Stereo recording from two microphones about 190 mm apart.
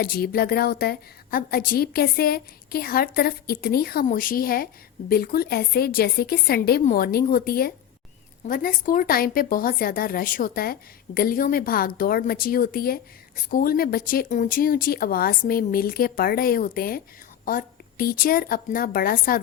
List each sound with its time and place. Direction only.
0.0 s a woman's voice: 55° left (ahead or behind)